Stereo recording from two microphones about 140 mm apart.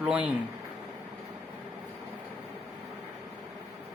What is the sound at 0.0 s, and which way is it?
Speech, 10° right (ahead or behind).